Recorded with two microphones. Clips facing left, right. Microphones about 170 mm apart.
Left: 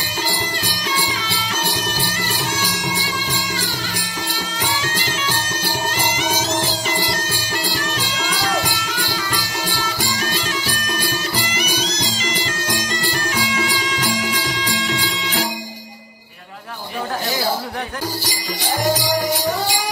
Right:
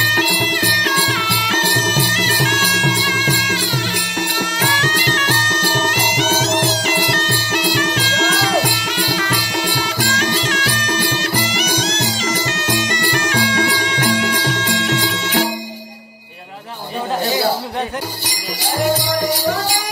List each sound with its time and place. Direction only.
0.1 s music: 70° right (ahead or behind)